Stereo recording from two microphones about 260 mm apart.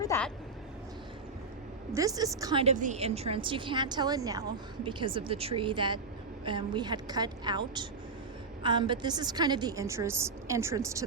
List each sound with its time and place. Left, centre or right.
0.0 s vehicle: centre
1.9 s a woman's voice: centre